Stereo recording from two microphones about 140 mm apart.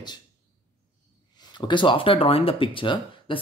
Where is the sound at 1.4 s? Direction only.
30° left (ahead or behind).